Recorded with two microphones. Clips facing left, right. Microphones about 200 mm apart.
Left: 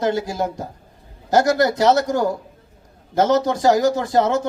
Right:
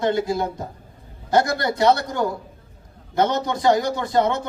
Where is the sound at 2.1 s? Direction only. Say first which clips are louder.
Left 4 dB; 45° left (ahead or behind).